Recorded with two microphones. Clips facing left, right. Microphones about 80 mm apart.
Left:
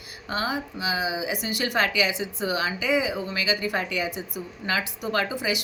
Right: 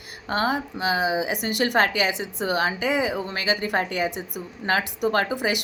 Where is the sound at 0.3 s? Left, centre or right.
Right.